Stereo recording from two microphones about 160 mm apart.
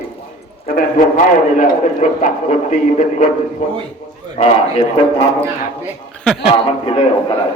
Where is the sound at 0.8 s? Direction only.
60° left (ahead or behind).